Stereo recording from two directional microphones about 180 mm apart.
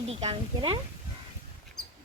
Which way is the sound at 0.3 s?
30° right (ahead or behind).